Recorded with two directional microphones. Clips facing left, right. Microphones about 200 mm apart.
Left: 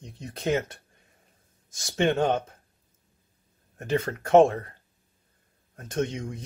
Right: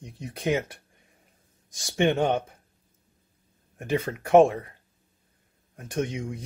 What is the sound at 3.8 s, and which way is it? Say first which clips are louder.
Speech: even; 10° right (ahead or behind).